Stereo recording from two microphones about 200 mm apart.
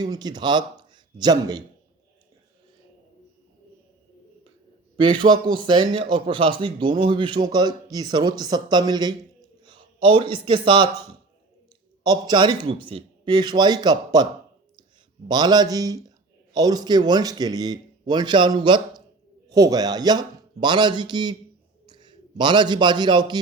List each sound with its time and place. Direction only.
0.0 s speech: 20° right (ahead or behind)
4.9 s speech: 25° right (ahead or behind)
12.0 s speech: 20° right (ahead or behind)
15.3 s a man's voice: 20° right (ahead or behind)